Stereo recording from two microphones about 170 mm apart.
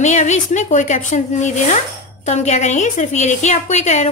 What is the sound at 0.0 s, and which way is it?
A woman's voice, 45° left (ahead or behind).